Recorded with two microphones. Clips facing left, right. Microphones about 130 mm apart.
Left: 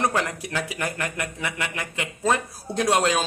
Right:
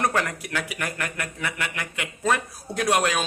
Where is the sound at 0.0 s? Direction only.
20° left (ahead or behind).